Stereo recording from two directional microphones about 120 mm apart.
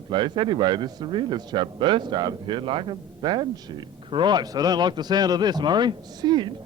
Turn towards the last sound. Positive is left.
turn(degrees=-40)  # may be behind; listen again after turning